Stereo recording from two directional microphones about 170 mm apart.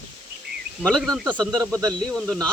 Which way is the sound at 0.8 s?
5° left (ahead or behind).